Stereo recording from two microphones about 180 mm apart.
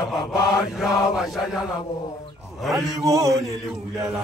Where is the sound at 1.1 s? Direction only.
5° right (ahead or behind).